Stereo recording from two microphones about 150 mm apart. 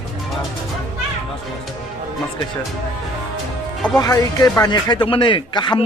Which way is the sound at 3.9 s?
25° left (ahead or behind).